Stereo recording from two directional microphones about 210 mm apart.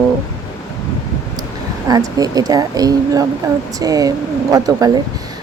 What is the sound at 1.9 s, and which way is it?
Speech, 15° right (ahead or behind).